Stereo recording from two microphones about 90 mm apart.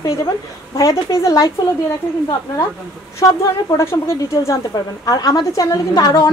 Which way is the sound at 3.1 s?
35° left (ahead or behind).